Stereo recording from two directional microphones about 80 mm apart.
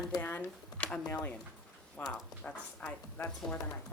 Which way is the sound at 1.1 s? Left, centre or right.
Left.